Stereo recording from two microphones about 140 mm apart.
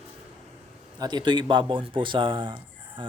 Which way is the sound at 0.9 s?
30° right (ahead or behind).